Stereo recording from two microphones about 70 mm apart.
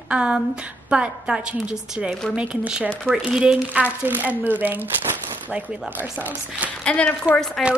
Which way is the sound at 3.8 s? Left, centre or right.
Right.